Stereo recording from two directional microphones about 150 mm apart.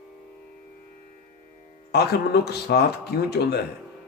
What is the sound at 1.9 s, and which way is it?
Speech, 90° left.